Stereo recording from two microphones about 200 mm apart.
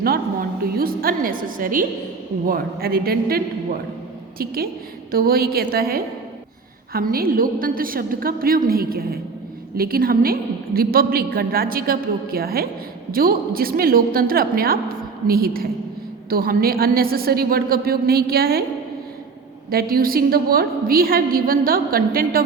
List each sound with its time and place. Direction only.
0.6 s a woman's voice: 50° right (ahead or behind)
19.7 s a woman's voice: 45° right (ahead or behind)